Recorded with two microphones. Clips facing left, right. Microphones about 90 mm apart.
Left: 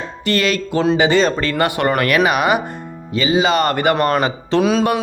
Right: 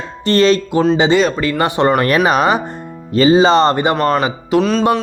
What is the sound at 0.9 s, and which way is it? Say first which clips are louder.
Speech: right 1 dB; 20° right (ahead or behind).